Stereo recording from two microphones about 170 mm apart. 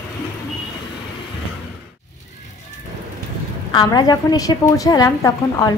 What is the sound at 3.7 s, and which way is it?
A woman's voice, 25° left (ahead or behind).